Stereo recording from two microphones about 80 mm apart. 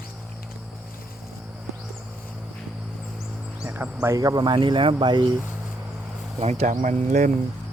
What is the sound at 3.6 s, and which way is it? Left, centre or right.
Insect, centre.